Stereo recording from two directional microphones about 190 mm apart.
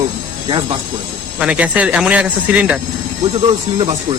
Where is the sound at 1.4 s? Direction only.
5° right (ahead or behind).